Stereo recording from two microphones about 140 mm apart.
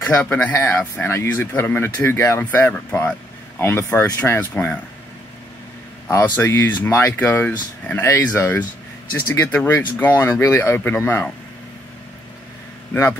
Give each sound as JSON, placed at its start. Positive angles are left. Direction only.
{"t": 0.1, "sound": "speech", "side_deg": 10}
{"t": 6.0, "sound": "speech", "side_deg": 20}